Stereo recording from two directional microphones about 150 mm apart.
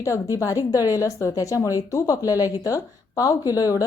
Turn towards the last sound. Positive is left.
turn(degrees=25)  # may be behind; listen again after turning